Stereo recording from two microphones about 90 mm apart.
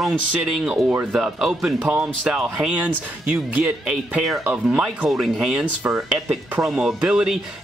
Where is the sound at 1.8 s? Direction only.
15° right (ahead or behind).